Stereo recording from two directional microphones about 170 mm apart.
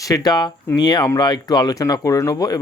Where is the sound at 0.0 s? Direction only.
20° left (ahead or behind).